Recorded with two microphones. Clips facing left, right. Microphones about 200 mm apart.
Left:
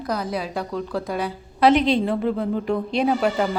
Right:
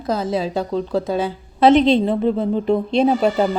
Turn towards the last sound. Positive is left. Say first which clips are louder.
# right 4 dB
turn(degrees=-25)  # may be behind; listen again after turning